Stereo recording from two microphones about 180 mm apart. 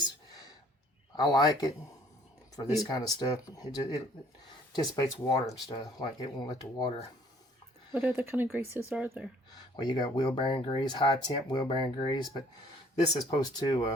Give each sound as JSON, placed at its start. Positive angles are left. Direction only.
{"t": 1.1, "sound": "speech", "side_deg": 25}
{"t": 2.9, "sound": "speech", "side_deg": 20}
{"t": 7.9, "sound": "speech", "side_deg": -10}
{"t": 9.7, "sound": "speech", "side_deg": 25}
{"t": 13.4, "sound": "speech", "side_deg": 25}